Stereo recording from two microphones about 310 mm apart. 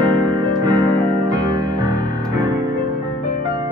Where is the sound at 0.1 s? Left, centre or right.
Centre.